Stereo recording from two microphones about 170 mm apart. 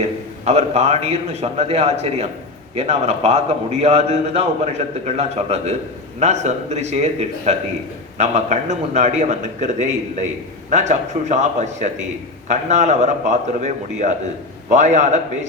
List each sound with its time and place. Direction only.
0.0 s a man's voice: 40° right (ahead or behind)